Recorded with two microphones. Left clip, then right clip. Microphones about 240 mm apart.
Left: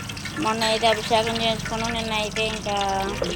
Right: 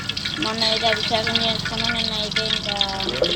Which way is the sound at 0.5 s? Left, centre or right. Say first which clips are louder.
Right 1 dB; centre.